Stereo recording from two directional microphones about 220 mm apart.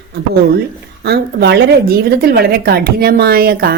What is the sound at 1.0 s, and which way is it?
A woman's voice, 45° right (ahead or behind).